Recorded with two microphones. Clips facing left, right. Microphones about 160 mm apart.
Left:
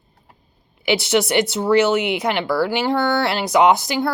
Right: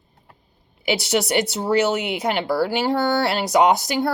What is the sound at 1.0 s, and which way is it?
Speech, 35° right (ahead or behind).